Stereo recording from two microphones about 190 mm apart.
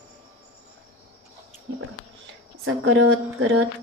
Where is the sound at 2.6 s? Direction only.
90° right.